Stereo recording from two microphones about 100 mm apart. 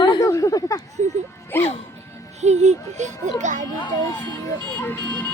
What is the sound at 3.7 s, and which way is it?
Speech, 40° left (ahead or behind).